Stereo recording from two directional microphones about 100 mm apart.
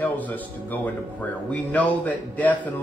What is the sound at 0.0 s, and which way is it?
A man's voice, 15° left (ahead or behind).